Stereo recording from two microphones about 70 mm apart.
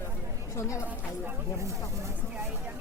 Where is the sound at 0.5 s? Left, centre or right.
Left.